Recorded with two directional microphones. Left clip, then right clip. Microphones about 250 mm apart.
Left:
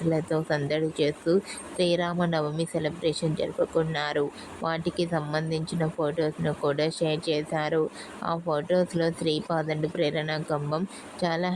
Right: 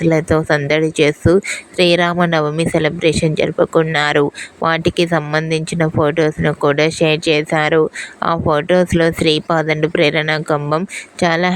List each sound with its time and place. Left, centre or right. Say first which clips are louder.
0.1 s speech: right 11 dB; right